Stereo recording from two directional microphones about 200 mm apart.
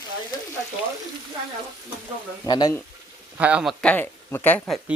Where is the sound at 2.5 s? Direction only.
20° left (ahead or behind).